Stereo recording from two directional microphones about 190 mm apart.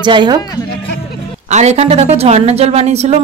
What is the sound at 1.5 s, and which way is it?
A woman's voice, 35° right (ahead or behind).